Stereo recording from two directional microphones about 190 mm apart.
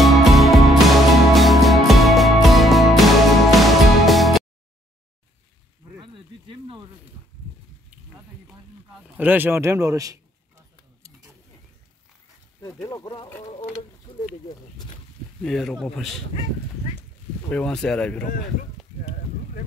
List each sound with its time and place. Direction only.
0.0 s music: centre (ahead or behind)
5.9 s a sound: 25° right (ahead or behind)
8.5 s a sound: 5° right (ahead or behind)
12.8 s speech: 20° left (ahead or behind)
15.4 s speech: centre (ahead or behind)
17.5 s speech: 5° left (ahead or behind)